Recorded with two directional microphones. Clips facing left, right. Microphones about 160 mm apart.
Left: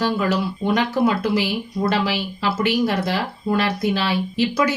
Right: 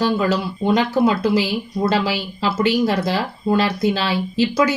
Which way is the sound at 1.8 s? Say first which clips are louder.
Right 1 dB; 30° right (ahead or behind).